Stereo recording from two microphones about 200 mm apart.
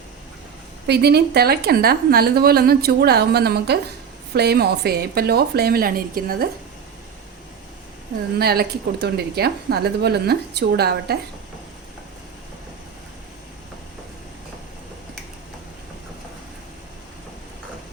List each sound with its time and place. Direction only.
0.9 s a woman's voice: 55° right (ahead or behind)
8.4 s a woman's voice: 50° right (ahead or behind)